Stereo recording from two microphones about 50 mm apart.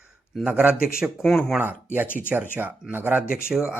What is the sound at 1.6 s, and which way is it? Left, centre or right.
Speech, right.